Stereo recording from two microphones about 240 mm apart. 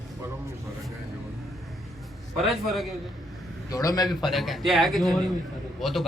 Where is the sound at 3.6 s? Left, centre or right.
Centre.